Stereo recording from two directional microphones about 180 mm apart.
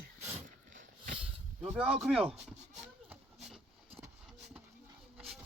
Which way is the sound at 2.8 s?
5° right (ahead or behind).